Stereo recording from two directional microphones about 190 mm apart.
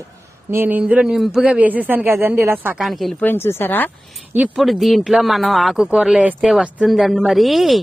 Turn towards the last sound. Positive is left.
turn(degrees=0)  # may be behind; listen again after turning